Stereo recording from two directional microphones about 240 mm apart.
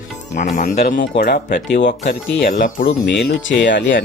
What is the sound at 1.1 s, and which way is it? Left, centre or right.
Speech, left.